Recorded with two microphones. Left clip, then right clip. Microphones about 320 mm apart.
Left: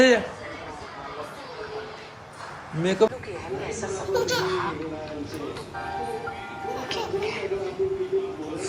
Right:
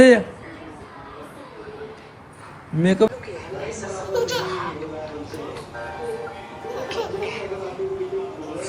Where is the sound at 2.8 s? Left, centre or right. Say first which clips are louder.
Right 3 dB; right.